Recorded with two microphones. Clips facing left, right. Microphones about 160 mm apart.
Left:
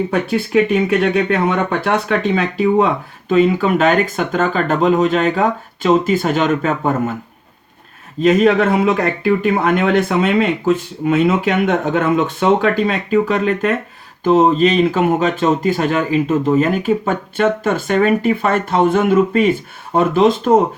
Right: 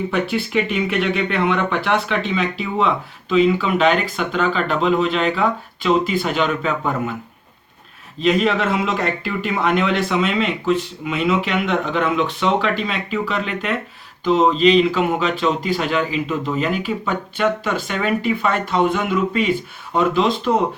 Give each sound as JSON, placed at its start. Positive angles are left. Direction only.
{"t": 0.1, "sound": "speech", "side_deg": 45}
{"t": 8.2, "sound": "speech", "side_deg": 50}